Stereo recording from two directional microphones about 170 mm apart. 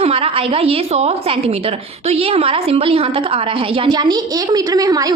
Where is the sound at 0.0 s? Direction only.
35° right (ahead or behind).